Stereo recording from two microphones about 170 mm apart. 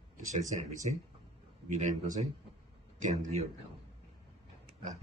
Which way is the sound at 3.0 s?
45° right (ahead or behind).